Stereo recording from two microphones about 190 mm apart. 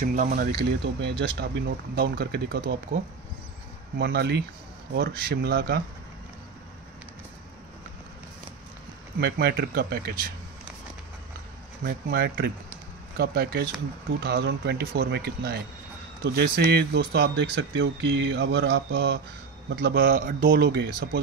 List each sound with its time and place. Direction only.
0.0 s speech: 45° right (ahead or behind)
4.0 s speech: 60° right (ahead or behind)
9.2 s speech: 55° right (ahead or behind)
11.8 s speech: 55° right (ahead or behind)
20.5 s speech: 65° right (ahead or behind)